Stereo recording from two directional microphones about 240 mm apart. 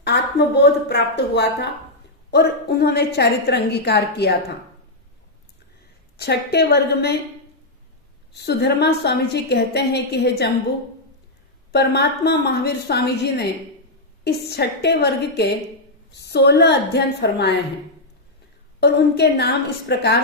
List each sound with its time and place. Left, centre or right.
0.0 s a woman's voice: left
6.1 s a woman's voice: left
8.4 s a woman's voice: left
11.7 s a woman's voice: left
18.8 s a woman's voice: left